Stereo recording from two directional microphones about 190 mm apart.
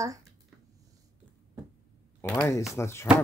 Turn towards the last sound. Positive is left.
turn(degrees=15)  # may be behind; listen again after turning